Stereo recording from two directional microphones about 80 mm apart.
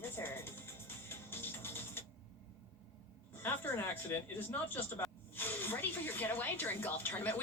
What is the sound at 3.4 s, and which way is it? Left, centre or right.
Speech, left.